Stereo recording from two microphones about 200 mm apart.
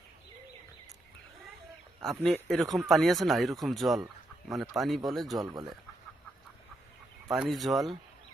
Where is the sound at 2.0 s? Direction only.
Centre (ahead or behind).